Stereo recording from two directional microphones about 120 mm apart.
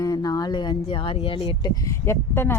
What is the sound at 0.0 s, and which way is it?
A woman's voice, 30° left (ahead or behind).